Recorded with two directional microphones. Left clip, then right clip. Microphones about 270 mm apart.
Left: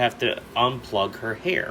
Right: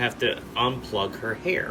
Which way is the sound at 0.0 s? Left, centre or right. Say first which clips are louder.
Left 2 dB; centre.